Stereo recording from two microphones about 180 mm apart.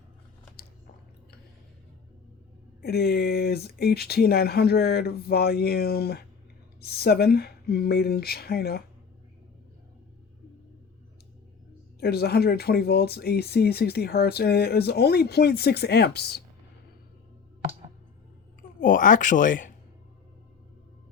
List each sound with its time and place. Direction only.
2.8 s speech: 60° left (ahead or behind)
11.9 s speech: 60° left (ahead or behind)
18.8 s speech: 50° left (ahead or behind)